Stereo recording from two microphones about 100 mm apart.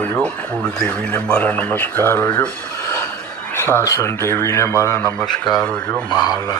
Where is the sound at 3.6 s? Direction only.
25° left (ahead or behind).